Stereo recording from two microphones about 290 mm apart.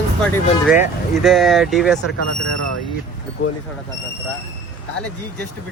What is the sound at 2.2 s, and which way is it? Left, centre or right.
Speech, right.